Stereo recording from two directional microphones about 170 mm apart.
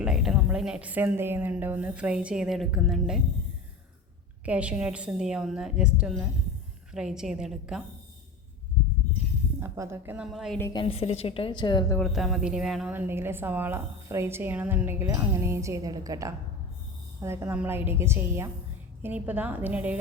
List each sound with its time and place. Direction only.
0.0 s a woman's voice: 5° right (ahead or behind)
4.4 s a woman's voice: 5° right (ahead or behind)
9.6 s a woman's voice: 15° right (ahead or behind)
10.2 s a woman's voice: centre (ahead or behind)
10.6 s a woman's voice: 25° left (ahead or behind)
11.9 s a woman's voice: centre (ahead or behind)